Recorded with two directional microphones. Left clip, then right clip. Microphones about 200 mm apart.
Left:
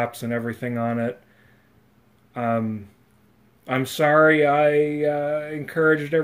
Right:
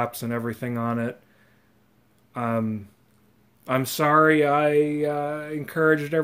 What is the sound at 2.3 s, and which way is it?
Speech, 45° right (ahead or behind).